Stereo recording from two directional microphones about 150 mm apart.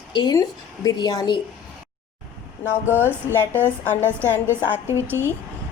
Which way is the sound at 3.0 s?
15° left (ahead or behind).